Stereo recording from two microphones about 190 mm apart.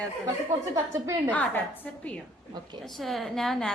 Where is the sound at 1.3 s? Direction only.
10° left (ahead or behind).